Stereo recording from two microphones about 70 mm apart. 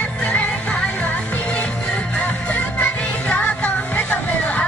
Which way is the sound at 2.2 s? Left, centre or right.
Centre.